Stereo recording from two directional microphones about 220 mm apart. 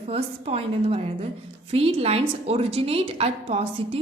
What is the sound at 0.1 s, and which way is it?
A woman's voice, 25° right (ahead or behind).